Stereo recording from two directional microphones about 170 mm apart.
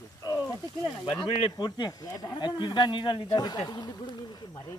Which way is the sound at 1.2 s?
25° left (ahead or behind).